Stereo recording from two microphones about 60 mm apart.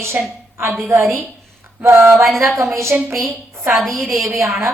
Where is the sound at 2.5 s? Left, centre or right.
Right.